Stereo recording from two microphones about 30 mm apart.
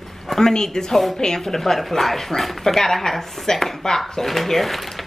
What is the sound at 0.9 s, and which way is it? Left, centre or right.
Speech, centre.